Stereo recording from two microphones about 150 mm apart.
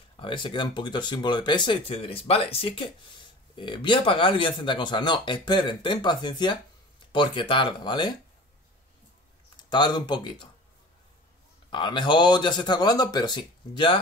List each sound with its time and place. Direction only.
0.2 s speech: 35° left (ahead or behind)
9.6 s speech: 30° left (ahead or behind)
11.7 s speech: 30° left (ahead or behind)